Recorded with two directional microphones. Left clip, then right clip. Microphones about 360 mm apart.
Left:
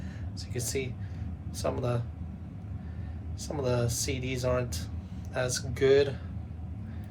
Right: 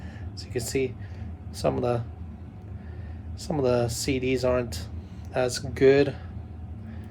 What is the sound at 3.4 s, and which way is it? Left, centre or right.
Speech, right.